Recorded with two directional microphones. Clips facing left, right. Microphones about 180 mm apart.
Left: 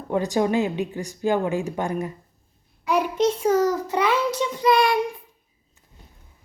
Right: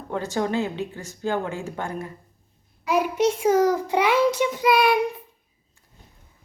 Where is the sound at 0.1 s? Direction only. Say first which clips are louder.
Left 4 dB; 15° left (ahead or behind).